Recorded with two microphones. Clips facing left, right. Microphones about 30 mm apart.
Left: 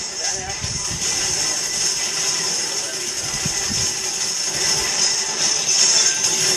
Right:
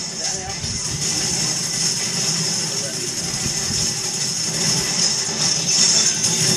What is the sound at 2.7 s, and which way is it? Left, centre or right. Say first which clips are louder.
Vehicle: even; left.